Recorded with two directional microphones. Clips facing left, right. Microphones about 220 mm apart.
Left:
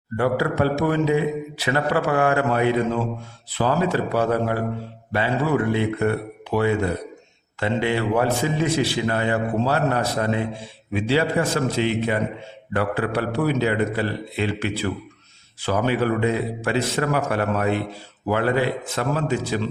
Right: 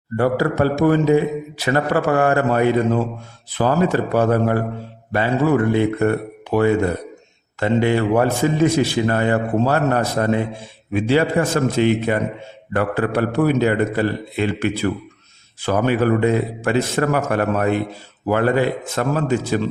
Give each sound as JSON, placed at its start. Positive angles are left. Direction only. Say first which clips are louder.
{"t": 0.2, "sound": "a man's voice", "louder": "right 3 dB", "side_deg": -40}